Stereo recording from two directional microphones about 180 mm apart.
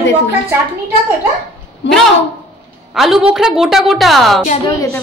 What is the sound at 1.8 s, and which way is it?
Speech, 80° left.